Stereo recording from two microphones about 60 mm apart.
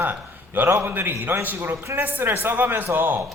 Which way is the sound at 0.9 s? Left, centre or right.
Right.